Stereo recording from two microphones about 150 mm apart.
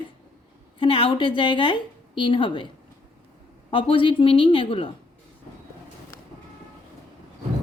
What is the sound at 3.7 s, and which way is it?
A woman's voice, 35° left (ahead or behind).